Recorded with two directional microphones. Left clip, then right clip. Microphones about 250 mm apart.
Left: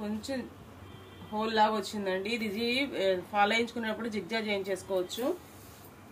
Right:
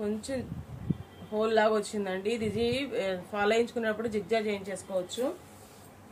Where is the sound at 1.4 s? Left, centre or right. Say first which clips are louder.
Right 2 dB; right.